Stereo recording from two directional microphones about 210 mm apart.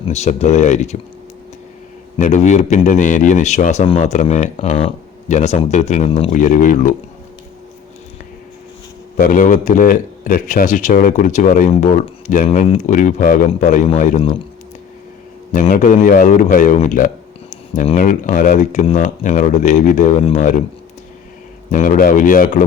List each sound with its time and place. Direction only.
0.0 s a man's voice: 30° left (ahead or behind)
2.1 s a man's voice: 35° left (ahead or behind)
9.1 s a man's voice: 40° left (ahead or behind)
15.7 s a man's voice: 40° left (ahead or behind)
21.7 s a man's voice: 40° left (ahead or behind)